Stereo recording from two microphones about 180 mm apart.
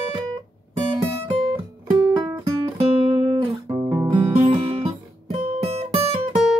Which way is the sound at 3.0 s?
30° right (ahead or behind).